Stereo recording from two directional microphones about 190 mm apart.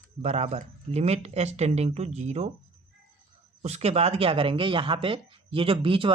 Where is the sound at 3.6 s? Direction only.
35° right (ahead or behind).